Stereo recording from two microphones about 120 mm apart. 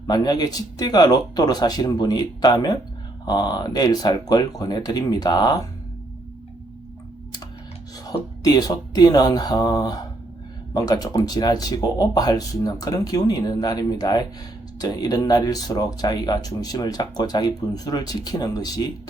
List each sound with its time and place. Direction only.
0.1 s speech: 35° left (ahead or behind)
8.0 s speech: 30° left (ahead or behind)